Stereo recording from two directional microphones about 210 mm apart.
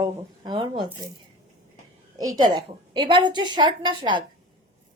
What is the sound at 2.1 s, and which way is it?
A woman's voice, 15° right (ahead or behind).